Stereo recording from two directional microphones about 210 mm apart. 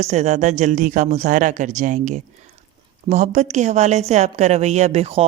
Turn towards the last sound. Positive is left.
turn(degrees=-30)  # may be behind; listen again after turning